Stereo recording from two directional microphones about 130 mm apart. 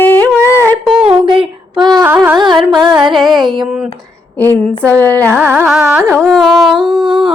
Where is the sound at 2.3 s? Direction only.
35° right (ahead or behind).